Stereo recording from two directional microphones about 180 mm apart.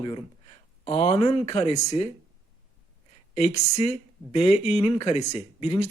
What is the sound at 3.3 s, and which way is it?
Speech, 40° left (ahead or behind).